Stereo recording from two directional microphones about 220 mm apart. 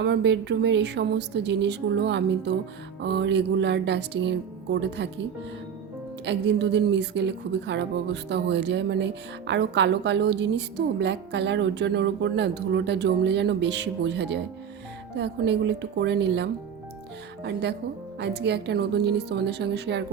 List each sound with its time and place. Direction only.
0.0 s a woman's voice: 50° right (ahead or behind)
6.2 s a woman's voice: 50° right (ahead or behind)